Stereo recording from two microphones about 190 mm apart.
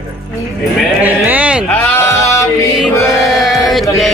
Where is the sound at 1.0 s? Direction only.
10° right (ahead or behind).